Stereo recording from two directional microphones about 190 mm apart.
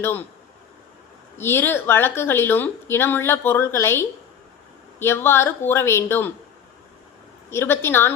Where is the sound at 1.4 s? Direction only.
10° left (ahead or behind).